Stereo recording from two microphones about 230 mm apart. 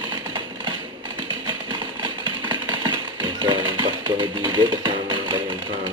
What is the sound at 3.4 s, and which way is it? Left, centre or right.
Music, right.